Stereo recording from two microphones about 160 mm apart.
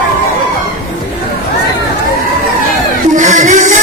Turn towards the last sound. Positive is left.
turn(degrees=-50)  # may be behind; listen again after turning